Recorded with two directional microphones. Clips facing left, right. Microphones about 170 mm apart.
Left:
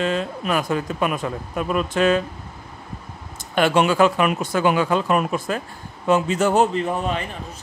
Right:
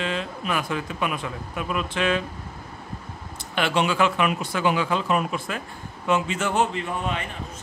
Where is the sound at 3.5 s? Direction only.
45° left (ahead or behind).